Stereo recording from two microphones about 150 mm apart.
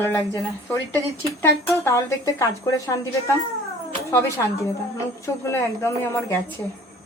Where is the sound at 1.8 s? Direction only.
20° left (ahead or behind).